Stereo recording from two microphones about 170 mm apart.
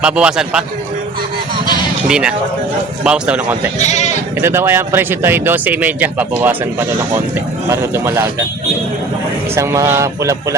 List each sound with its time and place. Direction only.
0.0 s a man's voice: 5° right (ahead or behind)
2.0 s a man's voice: 5° right (ahead or behind)
3.8 s speech: 40° left (ahead or behind)
4.4 s speech: 15° right (ahead or behind)
9.6 s speech: 15° right (ahead or behind)